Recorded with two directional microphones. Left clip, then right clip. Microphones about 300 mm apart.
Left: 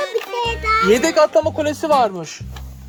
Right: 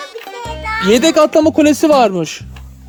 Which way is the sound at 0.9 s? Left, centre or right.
Right.